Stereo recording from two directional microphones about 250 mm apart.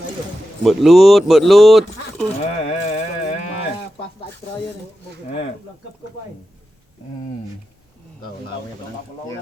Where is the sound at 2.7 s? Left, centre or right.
Left.